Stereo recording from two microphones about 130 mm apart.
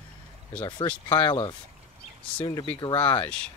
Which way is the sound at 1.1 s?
40° left (ahead or behind).